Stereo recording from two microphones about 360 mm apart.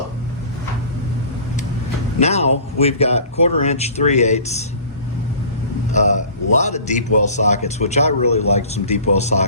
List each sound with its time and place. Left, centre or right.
2.1 s a man's voice: centre
5.9 s a man's voice: centre